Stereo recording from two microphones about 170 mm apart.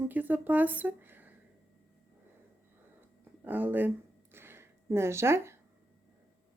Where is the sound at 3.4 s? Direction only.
10° right (ahead or behind).